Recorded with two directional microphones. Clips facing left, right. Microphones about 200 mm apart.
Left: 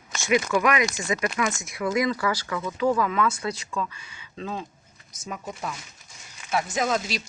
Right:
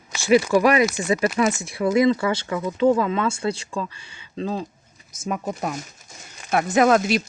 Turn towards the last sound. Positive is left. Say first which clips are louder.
# right 9 dB
turn(degrees=-60)  # may be behind; listen again after turning